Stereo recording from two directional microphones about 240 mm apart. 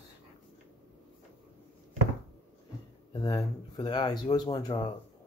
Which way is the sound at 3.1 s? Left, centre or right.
Centre.